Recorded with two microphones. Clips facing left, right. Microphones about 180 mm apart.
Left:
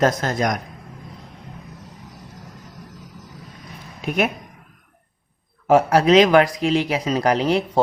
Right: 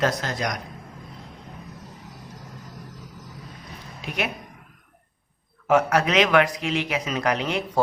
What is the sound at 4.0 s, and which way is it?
Speech, 50° left (ahead or behind).